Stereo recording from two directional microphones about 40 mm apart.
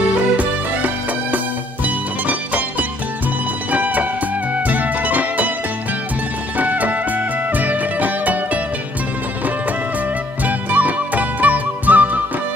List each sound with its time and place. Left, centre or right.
0.4 s music: right
3.7 s music: right
6.6 s music: right
10.4 s music: right